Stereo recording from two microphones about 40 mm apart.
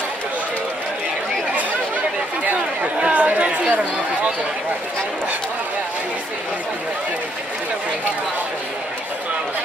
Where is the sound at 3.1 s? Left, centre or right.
Right.